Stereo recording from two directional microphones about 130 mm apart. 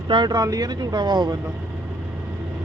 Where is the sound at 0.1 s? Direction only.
35° right (ahead or behind).